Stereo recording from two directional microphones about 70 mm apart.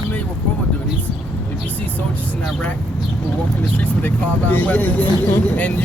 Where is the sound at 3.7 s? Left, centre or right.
Left.